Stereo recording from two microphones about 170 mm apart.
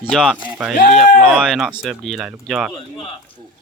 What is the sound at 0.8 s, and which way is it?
Speech, 55° left (ahead or behind).